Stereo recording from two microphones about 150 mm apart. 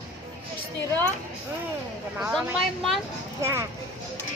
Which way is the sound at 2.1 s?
5° right (ahead or behind).